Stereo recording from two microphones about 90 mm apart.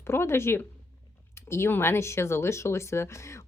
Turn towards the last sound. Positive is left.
turn(degrees=30)  # may be behind; listen again after turning